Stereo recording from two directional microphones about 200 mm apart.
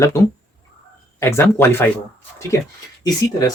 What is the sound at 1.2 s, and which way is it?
Speech, 15° left (ahead or behind).